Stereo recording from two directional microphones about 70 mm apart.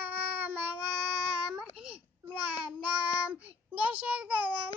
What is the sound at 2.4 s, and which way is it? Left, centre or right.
Child singing, centre.